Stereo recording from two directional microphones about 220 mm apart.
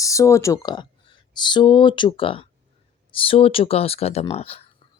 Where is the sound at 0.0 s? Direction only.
15° left (ahead or behind).